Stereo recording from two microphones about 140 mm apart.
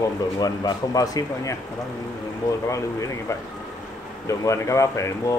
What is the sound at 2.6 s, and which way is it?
Speech, 20° left (ahead or behind).